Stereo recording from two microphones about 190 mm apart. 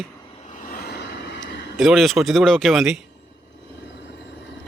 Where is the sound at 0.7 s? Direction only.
60° left (ahead or behind).